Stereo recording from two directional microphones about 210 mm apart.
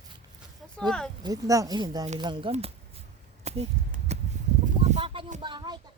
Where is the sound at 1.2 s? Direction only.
15° right (ahead or behind).